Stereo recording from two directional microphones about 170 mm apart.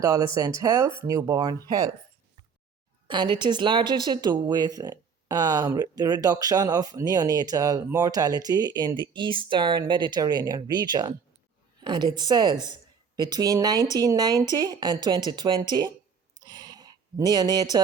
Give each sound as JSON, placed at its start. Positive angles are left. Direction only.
{"t": 0.0, "sound": "a woman's voice", "side_deg": -20}
{"t": 3.1, "sound": "a woman's voice", "side_deg": -25}
{"t": 16.4, "sound": "a sound", "side_deg": -20}